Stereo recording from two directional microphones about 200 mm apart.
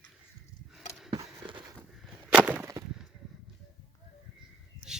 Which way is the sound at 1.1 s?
25° right (ahead or behind).